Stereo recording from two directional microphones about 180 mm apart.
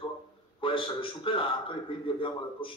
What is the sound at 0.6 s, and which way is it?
A man's voice, 30° left (ahead or behind).